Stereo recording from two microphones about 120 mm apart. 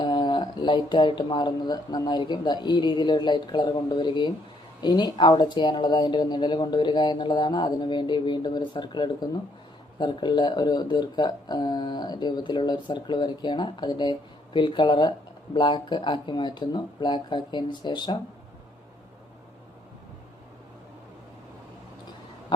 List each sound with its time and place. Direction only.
0.0 s speech: 40° left (ahead or behind)